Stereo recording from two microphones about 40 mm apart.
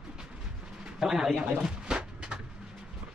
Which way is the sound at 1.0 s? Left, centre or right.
Centre.